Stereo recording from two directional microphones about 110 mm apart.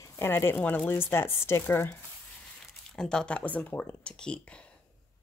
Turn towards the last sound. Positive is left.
turn(degrees=10)  # may be behind; listen again after turning